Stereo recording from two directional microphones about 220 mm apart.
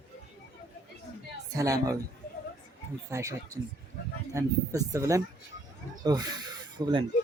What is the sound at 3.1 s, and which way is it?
A man's voice, 15° right (ahead or behind).